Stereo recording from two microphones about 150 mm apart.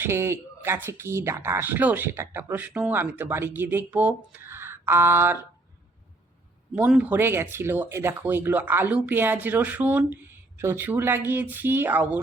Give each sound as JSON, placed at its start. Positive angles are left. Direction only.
{"t": 0.0, "sound": "speech", "side_deg": -15}
{"t": 6.7, "sound": "speech", "side_deg": -10}